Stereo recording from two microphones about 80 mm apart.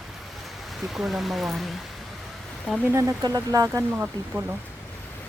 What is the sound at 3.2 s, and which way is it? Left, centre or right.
Speech, right.